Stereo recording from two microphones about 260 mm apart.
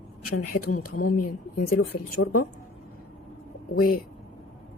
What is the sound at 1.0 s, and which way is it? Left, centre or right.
Speech, left.